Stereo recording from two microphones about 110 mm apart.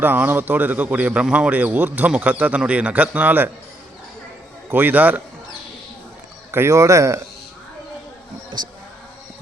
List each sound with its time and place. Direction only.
0.0 s a man's voice: 20° right (ahead or behind)
4.7 s a man's voice: 15° right (ahead or behind)
6.5 s speech: 25° right (ahead or behind)
8.5 s speech: 45° right (ahead or behind)